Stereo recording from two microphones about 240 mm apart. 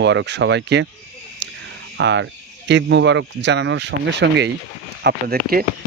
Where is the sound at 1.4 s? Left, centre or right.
Right.